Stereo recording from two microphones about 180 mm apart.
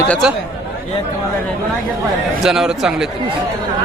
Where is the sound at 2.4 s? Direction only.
5° right (ahead or behind).